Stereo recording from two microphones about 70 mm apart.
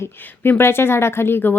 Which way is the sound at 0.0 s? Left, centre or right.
Left.